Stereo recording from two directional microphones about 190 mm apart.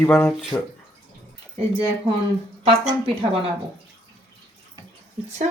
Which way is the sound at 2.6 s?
30° right (ahead or behind).